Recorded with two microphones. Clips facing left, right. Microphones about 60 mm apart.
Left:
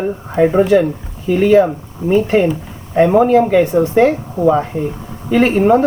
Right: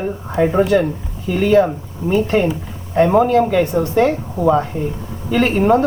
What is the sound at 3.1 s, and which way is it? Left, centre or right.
Speech, centre.